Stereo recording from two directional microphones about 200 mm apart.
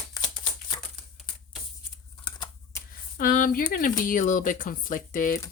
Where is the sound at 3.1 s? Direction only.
45° left (ahead or behind).